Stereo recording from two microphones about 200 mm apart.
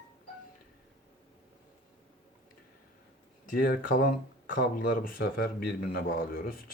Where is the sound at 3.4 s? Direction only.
40° left (ahead or behind).